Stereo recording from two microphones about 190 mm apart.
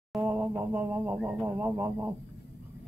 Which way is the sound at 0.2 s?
10° right (ahead or behind).